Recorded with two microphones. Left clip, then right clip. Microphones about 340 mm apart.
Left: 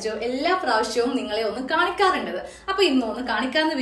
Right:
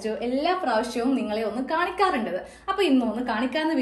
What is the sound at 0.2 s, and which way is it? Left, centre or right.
A woman's voice, centre.